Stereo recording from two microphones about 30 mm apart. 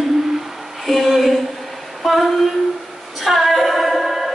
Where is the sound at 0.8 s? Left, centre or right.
Centre.